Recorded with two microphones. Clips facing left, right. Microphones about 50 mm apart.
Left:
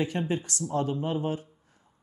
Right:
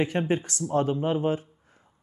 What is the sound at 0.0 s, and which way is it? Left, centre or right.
Speech, right.